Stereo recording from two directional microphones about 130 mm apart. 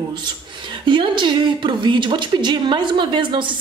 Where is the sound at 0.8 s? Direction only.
40° right (ahead or behind).